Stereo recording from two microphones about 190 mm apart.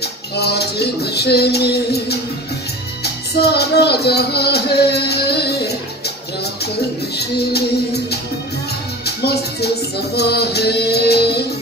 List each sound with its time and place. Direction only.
0.0 s a sound: 60° left (ahead or behind)
3.0 s music: 60° left (ahead or behind)
7.2 s music: 55° left (ahead or behind)
9.0 s music: 60° left (ahead or behind)